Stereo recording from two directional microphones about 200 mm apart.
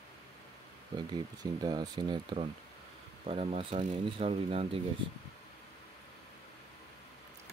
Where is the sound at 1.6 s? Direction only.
20° right (ahead or behind).